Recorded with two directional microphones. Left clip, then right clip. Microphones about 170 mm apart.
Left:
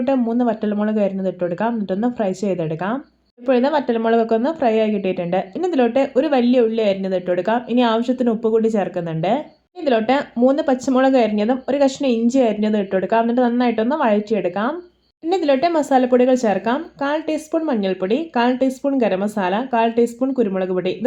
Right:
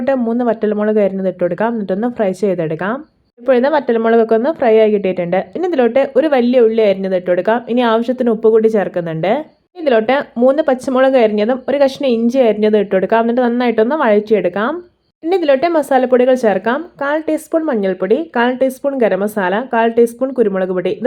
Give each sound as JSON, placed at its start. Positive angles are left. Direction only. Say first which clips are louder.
{"t": 0.0, "sound": "a woman's voice", "louder": "right 4 dB", "side_deg": -30}